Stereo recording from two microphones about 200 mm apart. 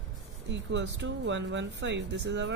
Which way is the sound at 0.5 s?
65° right (ahead or behind).